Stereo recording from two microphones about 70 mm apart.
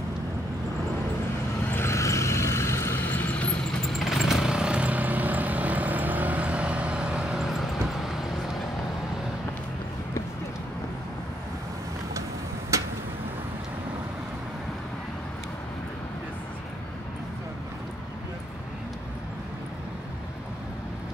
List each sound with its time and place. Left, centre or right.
1.7 s vehicle: left
3.8 s vehicle: centre
12.7 s a sound: right